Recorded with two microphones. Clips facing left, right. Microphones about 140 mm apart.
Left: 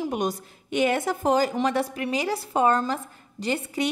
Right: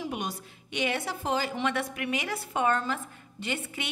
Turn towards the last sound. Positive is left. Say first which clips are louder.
# left 8 dB
turn(degrees=35)  # may be behind; listen again after turning